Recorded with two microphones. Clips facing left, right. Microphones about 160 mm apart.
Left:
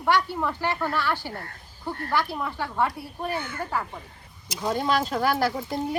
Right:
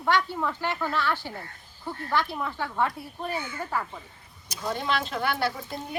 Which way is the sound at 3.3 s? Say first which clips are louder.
Left 2 dB; 60° left (ahead or behind).